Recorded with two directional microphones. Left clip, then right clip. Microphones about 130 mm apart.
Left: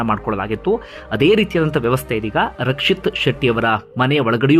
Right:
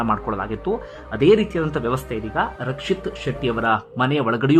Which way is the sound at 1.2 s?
35° left (ahead or behind).